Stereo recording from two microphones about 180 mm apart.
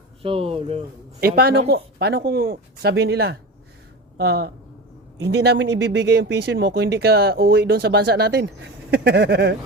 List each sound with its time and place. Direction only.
0.2 s speech: 30° right (ahead or behind)
1.2 s speech: 65° right (ahead or behind)